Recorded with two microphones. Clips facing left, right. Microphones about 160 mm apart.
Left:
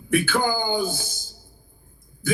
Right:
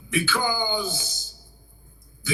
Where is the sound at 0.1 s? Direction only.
50° left (ahead or behind).